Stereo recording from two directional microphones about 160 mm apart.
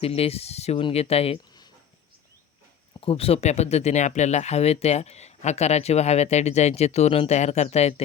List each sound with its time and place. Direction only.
0.0 s speech: 40° left (ahead or behind)
3.0 s speech: 35° left (ahead or behind)